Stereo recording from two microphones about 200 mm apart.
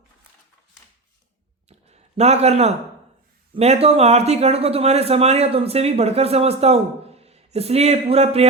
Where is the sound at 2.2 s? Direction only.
30° right (ahead or behind).